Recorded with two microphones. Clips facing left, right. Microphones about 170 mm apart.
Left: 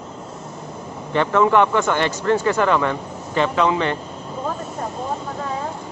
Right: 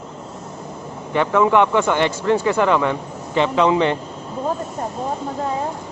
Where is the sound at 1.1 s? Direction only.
10° right (ahead or behind).